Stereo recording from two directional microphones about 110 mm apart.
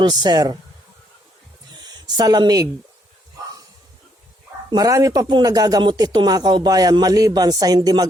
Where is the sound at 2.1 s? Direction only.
35° right (ahead or behind).